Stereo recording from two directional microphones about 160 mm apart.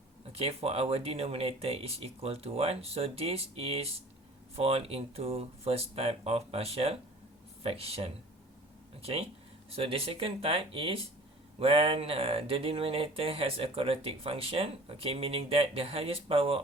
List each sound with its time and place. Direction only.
0.3 s speech: 40° right (ahead or behind)